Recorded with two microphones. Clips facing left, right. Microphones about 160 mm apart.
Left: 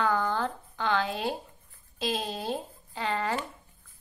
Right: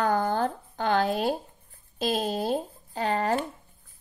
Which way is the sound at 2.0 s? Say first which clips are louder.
Right 5 dB; 40° right (ahead or behind).